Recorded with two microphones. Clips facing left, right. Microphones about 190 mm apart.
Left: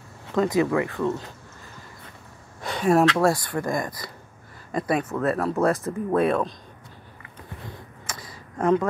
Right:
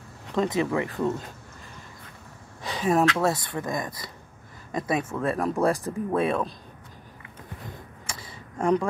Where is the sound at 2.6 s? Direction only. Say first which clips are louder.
Left 3 dB; 5° right (ahead or behind).